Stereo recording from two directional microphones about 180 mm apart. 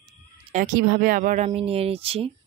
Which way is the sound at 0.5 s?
50° right (ahead or behind).